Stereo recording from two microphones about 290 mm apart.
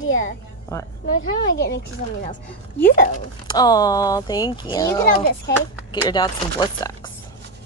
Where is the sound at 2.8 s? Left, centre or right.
Left.